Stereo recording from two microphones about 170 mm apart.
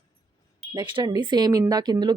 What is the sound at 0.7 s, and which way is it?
Speech, 25° right (ahead or behind).